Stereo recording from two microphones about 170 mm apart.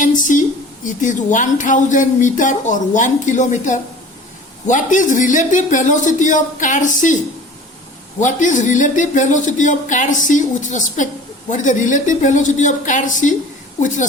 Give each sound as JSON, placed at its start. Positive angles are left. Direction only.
{"t": 0.0, "sound": "speech", "side_deg": 50}
{"t": 8.2, "sound": "speech", "side_deg": 50}